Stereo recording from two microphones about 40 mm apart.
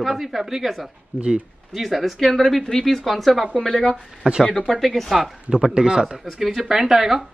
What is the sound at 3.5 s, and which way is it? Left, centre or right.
Speech, centre.